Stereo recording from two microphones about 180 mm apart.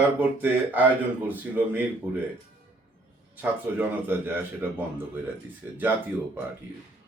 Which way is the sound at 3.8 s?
10° right (ahead or behind).